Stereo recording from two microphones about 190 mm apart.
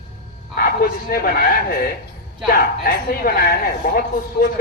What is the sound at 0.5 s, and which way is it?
A man's voice, 50° left (ahead or behind).